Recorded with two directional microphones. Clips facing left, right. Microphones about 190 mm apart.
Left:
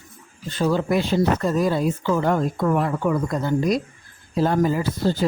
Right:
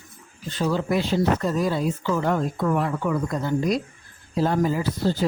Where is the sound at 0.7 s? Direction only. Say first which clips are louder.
Left 2 dB; 55° left (ahead or behind).